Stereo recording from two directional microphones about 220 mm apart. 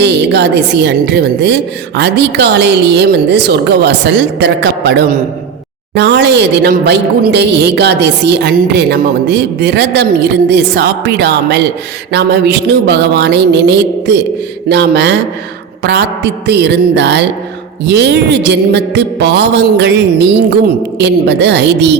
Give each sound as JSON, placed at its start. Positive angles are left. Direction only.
{"t": 0.0, "sound": "a woman's voice", "side_deg": -50}